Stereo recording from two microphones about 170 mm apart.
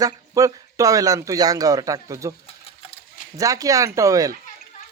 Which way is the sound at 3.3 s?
20° right (ahead or behind).